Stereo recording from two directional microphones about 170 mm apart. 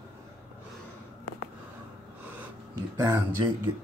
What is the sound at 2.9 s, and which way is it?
Speech, 20° right (ahead or behind).